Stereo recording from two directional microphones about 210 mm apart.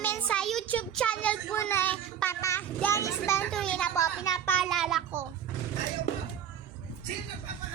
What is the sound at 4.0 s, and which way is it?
Speech, 15° left (ahead or behind).